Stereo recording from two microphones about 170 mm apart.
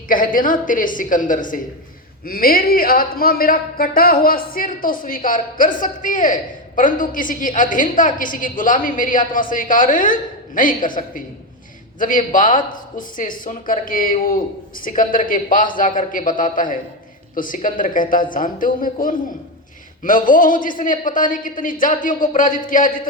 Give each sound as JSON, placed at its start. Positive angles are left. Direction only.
{"t": 0.1, "sound": "speech", "side_deg": 55}